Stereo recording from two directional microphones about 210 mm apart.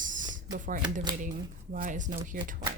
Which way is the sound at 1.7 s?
40° right (ahead or behind).